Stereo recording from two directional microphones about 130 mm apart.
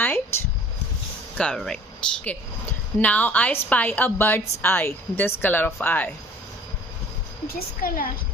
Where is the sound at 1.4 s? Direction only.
5° left (ahead or behind).